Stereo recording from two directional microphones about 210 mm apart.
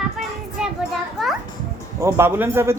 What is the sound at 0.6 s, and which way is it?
Children playing, 5° right (ahead or behind).